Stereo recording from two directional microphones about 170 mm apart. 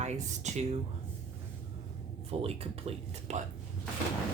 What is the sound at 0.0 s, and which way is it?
Speech, 40° right (ahead or behind).